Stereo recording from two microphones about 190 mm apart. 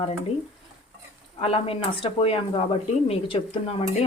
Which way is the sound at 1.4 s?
30° left (ahead or behind).